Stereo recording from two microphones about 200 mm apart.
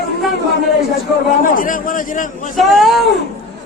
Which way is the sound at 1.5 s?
45° left (ahead or behind).